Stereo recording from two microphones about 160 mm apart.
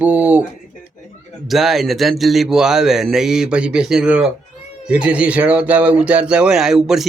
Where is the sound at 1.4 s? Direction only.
Centre (ahead or behind).